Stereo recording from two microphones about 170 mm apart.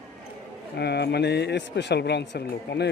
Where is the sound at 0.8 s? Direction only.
75° left (ahead or behind).